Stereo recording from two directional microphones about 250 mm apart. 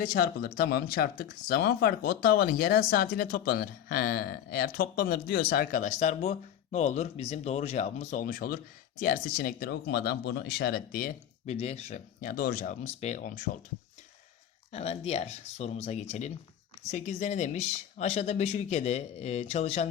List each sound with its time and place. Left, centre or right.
0.0 s speech: left
14.7 s speech: left